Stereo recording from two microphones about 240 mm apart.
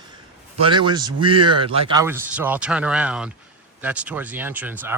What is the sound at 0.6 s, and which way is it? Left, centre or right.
Speech, centre.